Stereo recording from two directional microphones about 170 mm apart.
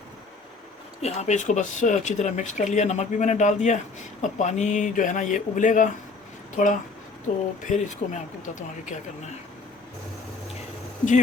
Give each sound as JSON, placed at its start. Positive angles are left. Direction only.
{"t": 1.0, "sound": "speech", "side_deg": 40}
{"t": 7.3, "sound": "speech", "side_deg": 50}